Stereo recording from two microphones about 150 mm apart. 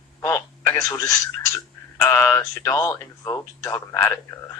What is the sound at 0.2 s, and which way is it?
Telephone, 20° left (ahead or behind).